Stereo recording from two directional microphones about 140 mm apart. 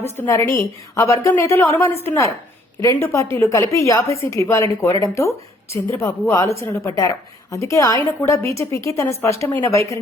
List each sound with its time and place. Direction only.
0.2 s a woman's voice: 15° left (ahead or behind)